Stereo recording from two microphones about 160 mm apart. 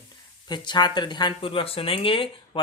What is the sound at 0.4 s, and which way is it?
Speech, 25° left (ahead or behind).